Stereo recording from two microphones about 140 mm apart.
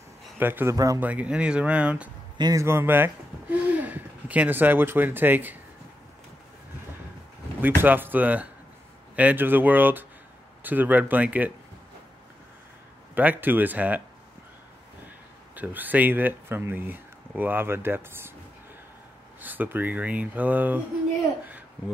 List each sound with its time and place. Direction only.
0.4 s speech: 15° right (ahead or behind)
1.0 s speech: 10° right (ahead or behind)
2.3 s a man's voice: 30° right (ahead or behind)
2.6 s speech: 15° right (ahead or behind)
7.6 s speech: 15° right (ahead or behind)
13.1 s speech: 10° right (ahead or behind)
15.5 s speech: 10° right (ahead or behind)
19.4 s speech: 15° right (ahead or behind)